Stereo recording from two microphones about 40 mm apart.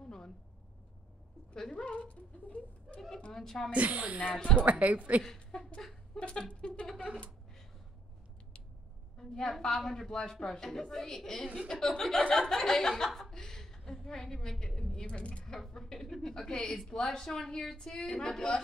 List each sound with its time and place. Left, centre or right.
1.7 s speech: left
3.3 s speech: centre
3.7 s a woman's voice: right
4.4 s a sound: left
4.6 s a woman's voice: right
5.2 s a sound: centre
6.1 s a sound: left
9.2 s speech: centre
11.6 s speech: centre
15.0 s speech: left
15.7 s speech: centre
16.6 s a woman's voice: centre